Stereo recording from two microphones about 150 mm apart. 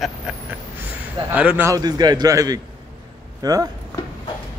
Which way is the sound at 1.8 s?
25° right (ahead or behind).